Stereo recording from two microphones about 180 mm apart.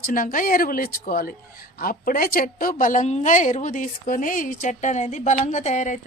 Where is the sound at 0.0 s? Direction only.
50° left (ahead or behind).